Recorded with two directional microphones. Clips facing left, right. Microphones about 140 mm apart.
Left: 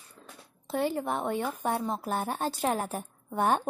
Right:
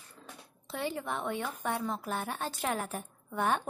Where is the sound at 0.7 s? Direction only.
45° left (ahead or behind).